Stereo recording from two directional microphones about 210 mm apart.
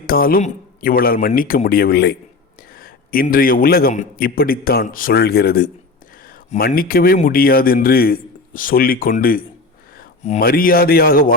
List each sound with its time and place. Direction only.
0.1 s speech: 45° left (ahead or behind)